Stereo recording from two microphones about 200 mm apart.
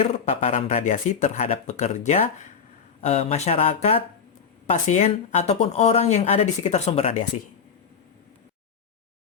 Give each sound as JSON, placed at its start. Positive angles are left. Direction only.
{"t": 0.0, "sound": "speech", "side_deg": 30}